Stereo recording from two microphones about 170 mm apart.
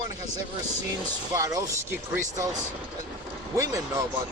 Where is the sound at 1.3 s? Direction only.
20° right (ahead or behind).